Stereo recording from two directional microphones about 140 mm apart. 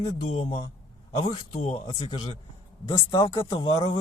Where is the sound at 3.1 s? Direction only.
25° left (ahead or behind).